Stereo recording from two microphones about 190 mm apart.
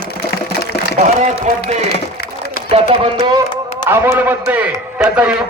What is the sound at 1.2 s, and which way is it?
Speech, 40° right (ahead or behind).